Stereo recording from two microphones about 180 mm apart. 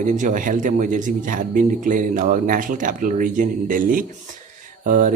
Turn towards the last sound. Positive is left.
turn(degrees=-45)  # may be behind; listen again after turning